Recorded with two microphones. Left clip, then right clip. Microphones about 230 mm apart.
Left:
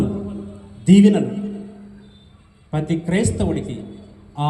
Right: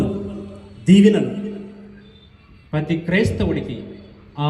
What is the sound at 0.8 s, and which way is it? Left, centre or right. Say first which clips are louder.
Speech: right 1 dB; left.